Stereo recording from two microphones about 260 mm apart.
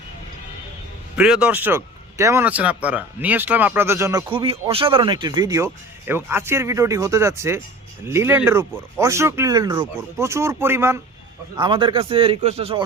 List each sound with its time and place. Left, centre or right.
1.1 s speech: centre; by 12.8 s right